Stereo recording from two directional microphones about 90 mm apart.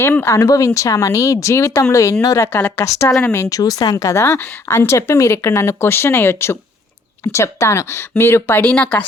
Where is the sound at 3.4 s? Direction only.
40° left (ahead or behind); by 8.7 s 25° left (ahead or behind).